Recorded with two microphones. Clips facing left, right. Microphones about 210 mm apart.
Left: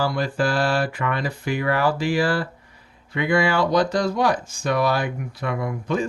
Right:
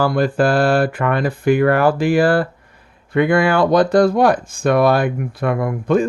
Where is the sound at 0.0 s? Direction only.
55° right (ahead or behind).